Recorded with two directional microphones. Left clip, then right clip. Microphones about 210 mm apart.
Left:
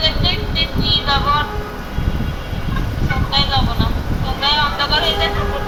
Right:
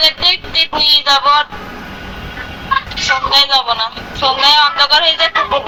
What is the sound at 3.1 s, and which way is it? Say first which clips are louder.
Speech: right 7 dB; 45° right (ahead or behind).